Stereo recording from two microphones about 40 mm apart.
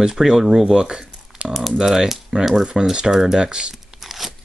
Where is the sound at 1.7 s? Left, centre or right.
Centre.